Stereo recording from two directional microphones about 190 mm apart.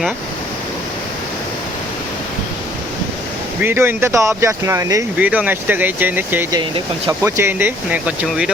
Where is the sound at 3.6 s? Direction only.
10° right (ahead or behind).